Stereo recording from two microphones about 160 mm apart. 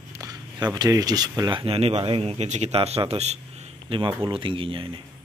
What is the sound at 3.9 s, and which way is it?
Speech, 30° right (ahead or behind).